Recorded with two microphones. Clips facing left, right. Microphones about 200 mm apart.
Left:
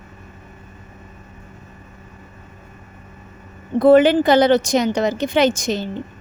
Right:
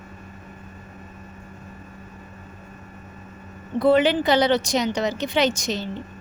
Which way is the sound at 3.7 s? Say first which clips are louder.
Left 6 dB; 50° left (ahead or behind).